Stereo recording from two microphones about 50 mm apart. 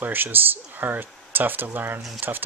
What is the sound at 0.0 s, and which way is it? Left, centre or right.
Speech, right.